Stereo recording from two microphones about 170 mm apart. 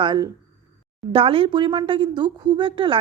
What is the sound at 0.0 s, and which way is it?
A woman's voice, 25° right (ahead or behind).